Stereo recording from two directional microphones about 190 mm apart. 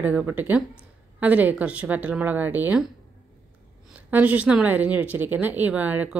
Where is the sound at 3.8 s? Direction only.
5° right (ahead or behind).